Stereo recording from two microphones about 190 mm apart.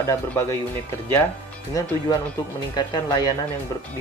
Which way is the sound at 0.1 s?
15° left (ahead or behind).